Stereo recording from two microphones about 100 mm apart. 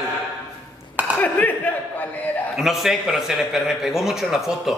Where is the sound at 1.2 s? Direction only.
15° left (ahead or behind).